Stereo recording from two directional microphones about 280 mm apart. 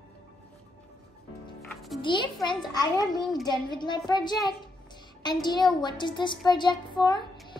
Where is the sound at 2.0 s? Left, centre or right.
Centre.